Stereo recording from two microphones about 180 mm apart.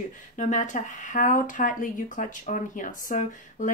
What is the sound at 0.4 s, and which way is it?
Speech, 45° left (ahead or behind).